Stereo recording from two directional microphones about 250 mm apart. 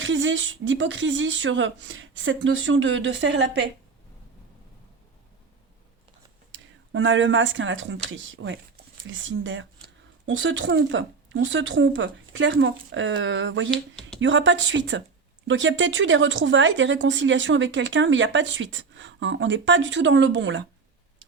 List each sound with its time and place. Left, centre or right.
0.0 s speech: right
6.5 s speech: right